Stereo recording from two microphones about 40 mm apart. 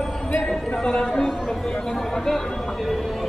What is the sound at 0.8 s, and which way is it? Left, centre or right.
Chatter, centre.